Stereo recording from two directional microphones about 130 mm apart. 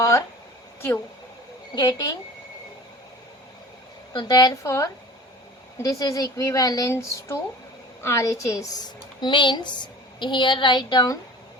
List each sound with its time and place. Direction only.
0.0 s speech: 25° left (ahead or behind)
1.7 s a woman's voice: 30° left (ahead or behind)
4.1 s a woman's voice: 35° left (ahead or behind)